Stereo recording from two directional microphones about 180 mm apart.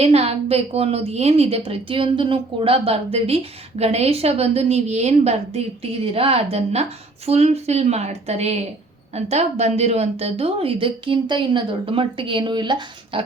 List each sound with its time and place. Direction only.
0.0 s a woman's voice: 35° right (ahead or behind)